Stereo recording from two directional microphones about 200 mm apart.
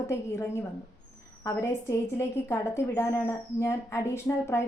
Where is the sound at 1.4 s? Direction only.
15° left (ahead or behind).